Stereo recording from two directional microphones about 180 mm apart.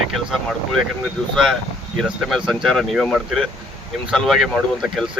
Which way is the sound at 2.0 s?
Centre (ahead or behind).